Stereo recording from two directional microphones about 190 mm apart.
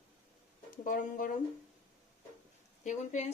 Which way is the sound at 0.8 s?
45° left (ahead or behind).